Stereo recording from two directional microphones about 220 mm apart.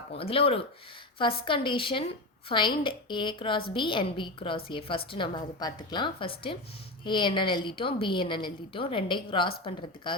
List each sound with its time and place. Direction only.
0.2 s a woman's voice: 25° left (ahead or behind)